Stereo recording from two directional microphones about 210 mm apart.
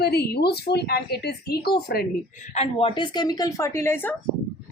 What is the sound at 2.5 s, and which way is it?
Speech, 30° left (ahead or behind).